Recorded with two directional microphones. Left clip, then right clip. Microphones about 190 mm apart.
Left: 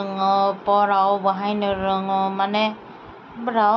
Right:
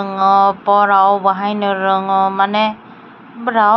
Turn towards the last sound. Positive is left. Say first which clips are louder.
# right 6 dB
turn(degrees=-20)  # may be behind; listen again after turning